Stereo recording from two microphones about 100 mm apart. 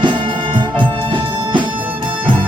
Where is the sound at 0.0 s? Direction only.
50° right (ahead or behind).